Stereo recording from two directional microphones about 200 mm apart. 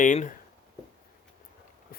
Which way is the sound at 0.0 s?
40° left (ahead or behind).